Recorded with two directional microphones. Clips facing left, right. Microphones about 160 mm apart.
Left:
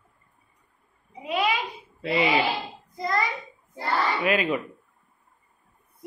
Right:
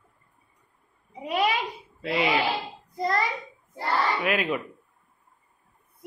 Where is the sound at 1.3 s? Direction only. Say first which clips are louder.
Even; 40° right (ahead or behind).